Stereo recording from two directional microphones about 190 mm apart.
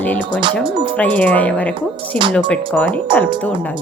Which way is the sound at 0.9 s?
5° left (ahead or behind).